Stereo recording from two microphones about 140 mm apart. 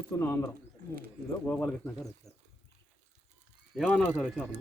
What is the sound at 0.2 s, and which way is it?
Speech, 15° left (ahead or behind).